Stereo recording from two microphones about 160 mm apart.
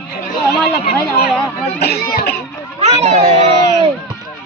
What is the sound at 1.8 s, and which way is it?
Speech, 80° left.